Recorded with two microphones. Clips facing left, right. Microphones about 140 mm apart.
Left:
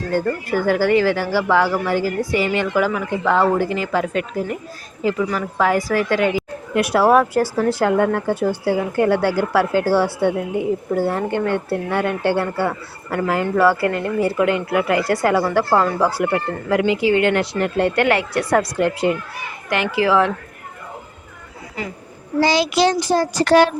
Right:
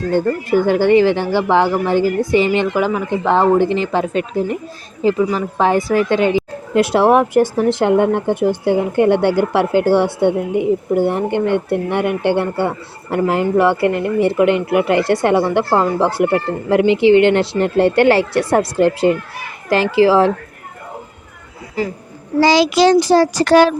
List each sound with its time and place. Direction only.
0.1 s speech: 20° right (ahead or behind)
22.4 s a child's voice: 90° right